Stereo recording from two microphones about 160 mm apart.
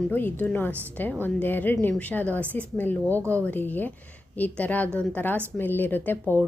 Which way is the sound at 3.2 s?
15° right (ahead or behind).